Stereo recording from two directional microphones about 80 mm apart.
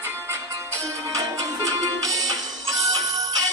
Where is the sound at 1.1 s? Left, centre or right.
Right.